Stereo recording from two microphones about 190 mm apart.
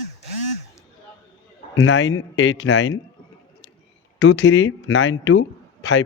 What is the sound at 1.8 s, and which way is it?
Speech, 75° left (ahead or behind).